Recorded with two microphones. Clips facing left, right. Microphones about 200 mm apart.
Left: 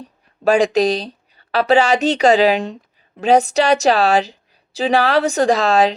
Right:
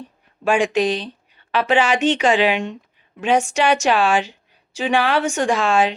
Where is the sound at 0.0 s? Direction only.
35° left (ahead or behind).